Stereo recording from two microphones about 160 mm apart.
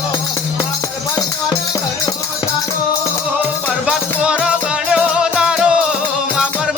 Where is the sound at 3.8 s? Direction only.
5° right (ahead or behind).